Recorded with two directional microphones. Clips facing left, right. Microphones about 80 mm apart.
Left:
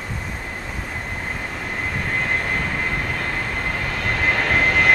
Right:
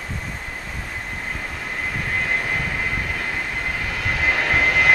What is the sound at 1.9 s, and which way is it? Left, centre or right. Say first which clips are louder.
Vehicle: even; centre.